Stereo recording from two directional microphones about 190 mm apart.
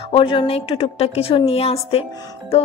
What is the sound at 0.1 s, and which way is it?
A woman's voice, 25° left (ahead or behind).